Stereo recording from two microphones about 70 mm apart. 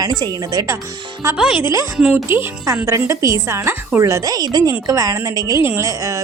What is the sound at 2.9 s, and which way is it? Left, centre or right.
A woman's voice, right.